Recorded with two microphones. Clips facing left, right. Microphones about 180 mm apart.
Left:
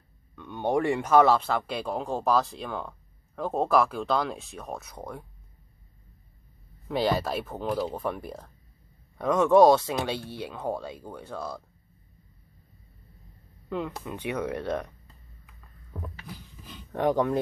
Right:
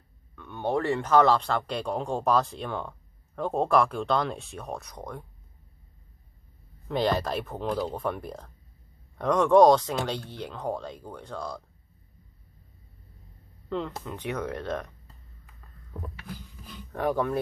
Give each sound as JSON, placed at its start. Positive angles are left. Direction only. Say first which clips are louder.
{"t": 0.4, "sound": "speech", "louder": "left 2 dB", "side_deg": 15}
{"t": 6.9, "sound": "speech", "louder": "even", "side_deg": 5}
{"t": 13.7, "sound": "speech", "louder": "even", "side_deg": 10}
{"t": 16.9, "sound": "speech", "louder": "left 2 dB", "side_deg": 20}